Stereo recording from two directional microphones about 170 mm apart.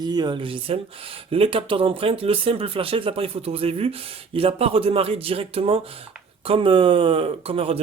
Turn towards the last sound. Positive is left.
turn(degrees=-35)  # may be behind; listen again after turning